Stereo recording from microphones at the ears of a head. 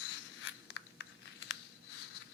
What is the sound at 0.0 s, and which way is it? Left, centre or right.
Biting, left.